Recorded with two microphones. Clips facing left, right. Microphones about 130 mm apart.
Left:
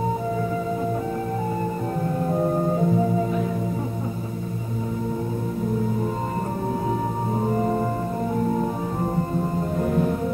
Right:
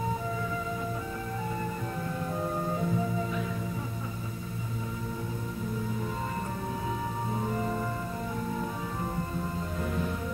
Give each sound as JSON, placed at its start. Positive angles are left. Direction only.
{"t": 2.0, "sound": "music", "side_deg": 40}
{"t": 7.3, "sound": "music", "side_deg": 40}